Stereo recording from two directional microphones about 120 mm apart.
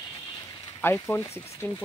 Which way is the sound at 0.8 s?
15° left (ahead or behind).